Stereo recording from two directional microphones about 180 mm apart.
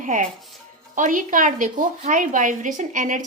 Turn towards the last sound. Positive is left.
turn(degrees=-45)  # may be behind; listen again after turning